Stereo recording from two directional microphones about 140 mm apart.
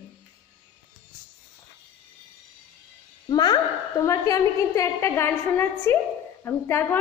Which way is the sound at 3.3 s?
30° left (ahead or behind).